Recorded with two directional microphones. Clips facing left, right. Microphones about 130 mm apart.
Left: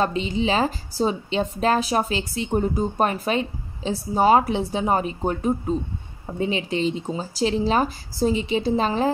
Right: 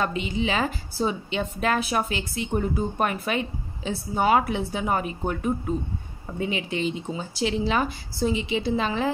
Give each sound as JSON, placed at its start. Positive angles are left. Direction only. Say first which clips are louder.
{"t": 0.0, "sound": "a woman's voice", "louder": "left 3 dB", "side_deg": 30}